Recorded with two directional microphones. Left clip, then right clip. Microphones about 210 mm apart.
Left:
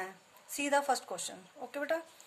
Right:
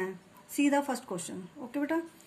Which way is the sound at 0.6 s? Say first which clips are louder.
Right 2 dB; 35° left (ahead or behind).